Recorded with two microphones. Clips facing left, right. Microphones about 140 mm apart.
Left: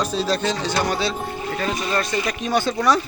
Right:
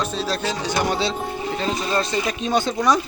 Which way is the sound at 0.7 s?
20° right (ahead or behind).